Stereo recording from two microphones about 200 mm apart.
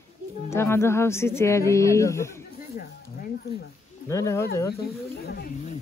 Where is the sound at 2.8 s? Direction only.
50° left (ahead or behind).